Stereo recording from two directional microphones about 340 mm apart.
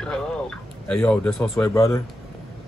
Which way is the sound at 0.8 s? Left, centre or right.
Centre.